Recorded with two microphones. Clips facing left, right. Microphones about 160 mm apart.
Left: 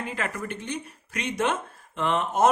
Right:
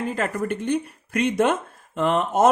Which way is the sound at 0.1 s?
45° right (ahead or behind).